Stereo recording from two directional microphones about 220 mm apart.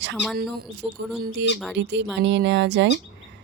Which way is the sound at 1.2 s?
50° right (ahead or behind).